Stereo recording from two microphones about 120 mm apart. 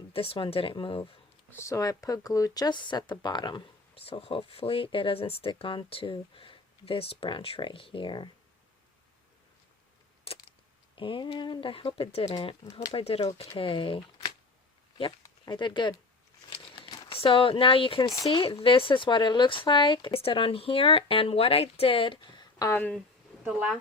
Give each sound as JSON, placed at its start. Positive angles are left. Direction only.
{"t": 0.1, "sound": "speech", "side_deg": 50}
{"t": 1.5, "sound": "speech", "side_deg": 25}
{"t": 10.3, "sound": "a sound", "side_deg": 55}
{"t": 10.9, "sound": "speech", "side_deg": 45}
{"t": 15.4, "sound": "speech", "side_deg": 40}
{"t": 16.5, "sound": "crumpling", "side_deg": 45}
{"t": 18.1, "sound": "speech", "side_deg": 30}
{"t": 18.4, "sound": "speech", "side_deg": 50}
{"t": 22.7, "sound": "speech", "side_deg": 15}
{"t": 23.4, "sound": "speech", "side_deg": -5}